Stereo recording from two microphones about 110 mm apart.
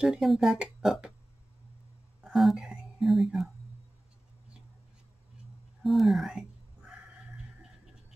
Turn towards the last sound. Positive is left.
turn(degrees=0)  # may be behind; listen again after turning